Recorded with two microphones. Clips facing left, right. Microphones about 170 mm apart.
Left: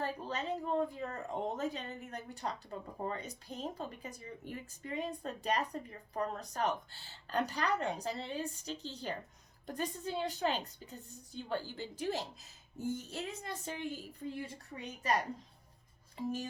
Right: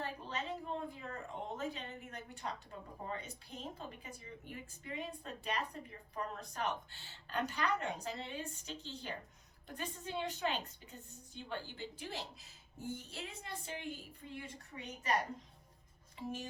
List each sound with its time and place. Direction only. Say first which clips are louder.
0.0 s a woman's voice: left 4 dB; 40° left (ahead or behind)
16.1 s a woman's voice: left 5 dB; 40° left (ahead or behind)